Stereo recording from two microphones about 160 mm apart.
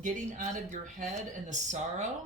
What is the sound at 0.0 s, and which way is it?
Speech, 50° right (ahead or behind).